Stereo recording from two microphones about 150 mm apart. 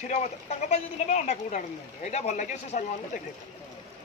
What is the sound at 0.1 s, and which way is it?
Speech, 50° left (ahead or behind).